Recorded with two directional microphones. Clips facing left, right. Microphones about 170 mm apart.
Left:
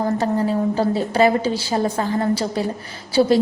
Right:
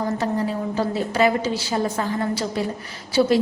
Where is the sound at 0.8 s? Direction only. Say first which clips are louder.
Left 2 dB; 30° left (ahead or behind).